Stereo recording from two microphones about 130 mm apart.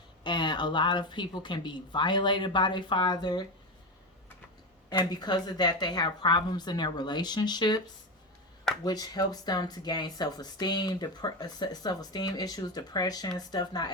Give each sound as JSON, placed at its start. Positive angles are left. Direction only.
{"t": 0.3, "sound": "speech", "side_deg": 35}
{"t": 4.9, "sound": "speech", "side_deg": 35}
{"t": 8.8, "sound": "speech", "side_deg": 30}